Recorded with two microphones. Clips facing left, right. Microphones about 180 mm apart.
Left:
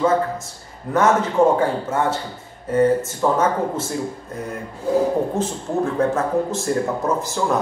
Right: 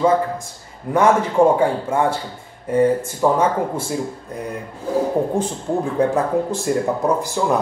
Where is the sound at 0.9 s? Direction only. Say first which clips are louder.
Right 1 dB; 10° right (ahead or behind).